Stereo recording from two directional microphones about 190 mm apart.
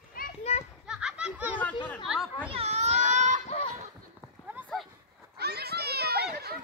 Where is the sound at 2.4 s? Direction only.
30° right (ahead or behind).